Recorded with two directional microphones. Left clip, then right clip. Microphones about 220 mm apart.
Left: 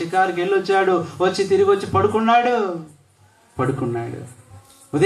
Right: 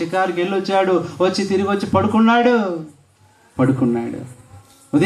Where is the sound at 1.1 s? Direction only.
50° right (ahead or behind).